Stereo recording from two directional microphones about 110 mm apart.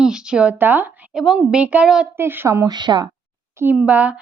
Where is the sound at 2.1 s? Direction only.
20° right (ahead or behind).